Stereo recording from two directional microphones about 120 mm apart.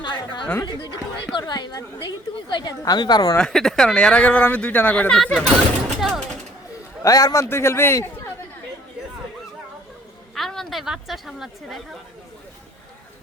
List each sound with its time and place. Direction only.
0.0 s a sound: 40° left (ahead or behind)
1.4 s a woman's voice: 35° left (ahead or behind)
3.3 s speech: 5° left (ahead or behind)
6.0 s a sound: centre (ahead or behind)
7.0 s a man's voice: 30° left (ahead or behind)
10.3 s a woman's voice: 5° left (ahead or behind)